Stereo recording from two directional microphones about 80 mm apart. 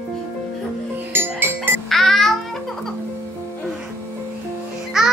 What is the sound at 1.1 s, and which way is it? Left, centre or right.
Music, right.